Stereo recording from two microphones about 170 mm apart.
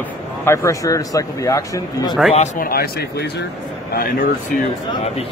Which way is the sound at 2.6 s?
60° left (ahead or behind).